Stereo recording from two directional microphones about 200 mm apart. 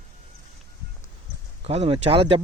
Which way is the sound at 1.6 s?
30° right (ahead or behind).